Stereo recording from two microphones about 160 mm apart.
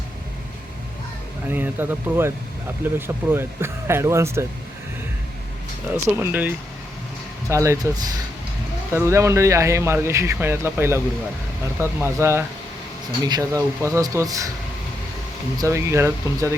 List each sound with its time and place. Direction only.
1.5 s speech: 10° right (ahead or behind)
5.9 s speech: 10° right (ahead or behind)
15.5 s speech: 20° right (ahead or behind)